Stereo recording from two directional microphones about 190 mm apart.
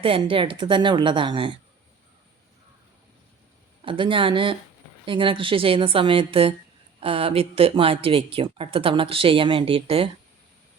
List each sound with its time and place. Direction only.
0.0 s speech: 30° right (ahead or behind)
3.8 s speech: 25° right (ahead or behind)